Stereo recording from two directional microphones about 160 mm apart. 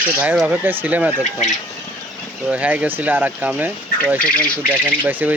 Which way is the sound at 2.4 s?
10° right (ahead or behind).